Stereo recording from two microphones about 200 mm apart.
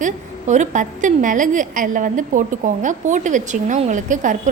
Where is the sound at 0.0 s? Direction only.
35° right (ahead or behind).